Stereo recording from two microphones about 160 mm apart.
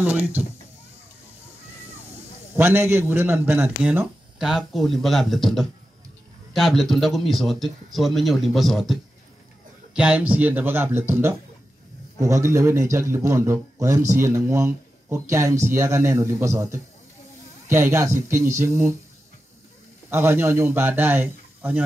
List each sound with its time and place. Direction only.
0.0 s a man's voice: 10° right (ahead or behind)
2.5 s a man's voice: 15° right (ahead or behind)
20.1 s a man's voice: 15° right (ahead or behind)